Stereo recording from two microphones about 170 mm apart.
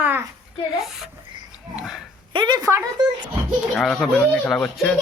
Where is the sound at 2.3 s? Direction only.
25° right (ahead or behind).